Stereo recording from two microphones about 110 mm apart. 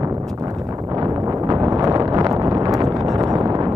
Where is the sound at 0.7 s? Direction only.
35° right (ahead or behind).